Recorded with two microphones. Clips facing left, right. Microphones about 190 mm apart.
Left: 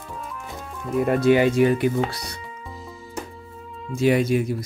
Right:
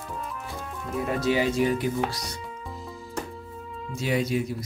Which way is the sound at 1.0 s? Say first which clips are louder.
Left 7 dB; 55° left (ahead or behind).